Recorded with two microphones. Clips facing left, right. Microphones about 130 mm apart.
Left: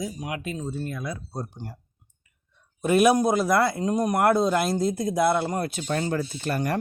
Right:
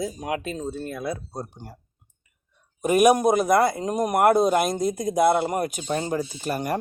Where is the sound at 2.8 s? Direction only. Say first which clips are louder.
Right 1 dB; 15° right (ahead or behind).